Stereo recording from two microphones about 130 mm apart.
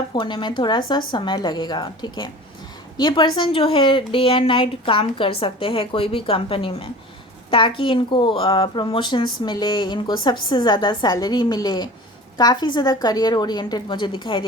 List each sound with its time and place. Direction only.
0.1 s speech: 40° left (ahead or behind)